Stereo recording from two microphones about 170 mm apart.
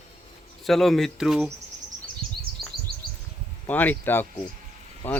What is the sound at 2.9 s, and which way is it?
Bird, 65° right (ahead or behind).